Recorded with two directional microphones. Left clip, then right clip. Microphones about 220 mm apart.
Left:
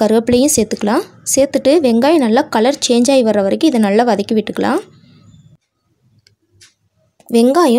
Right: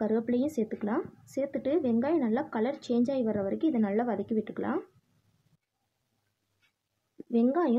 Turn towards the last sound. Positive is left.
turn(degrees=35)  # may be behind; listen again after turning